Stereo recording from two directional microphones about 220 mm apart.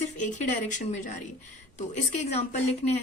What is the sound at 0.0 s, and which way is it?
A woman's voice, 35° left (ahead or behind).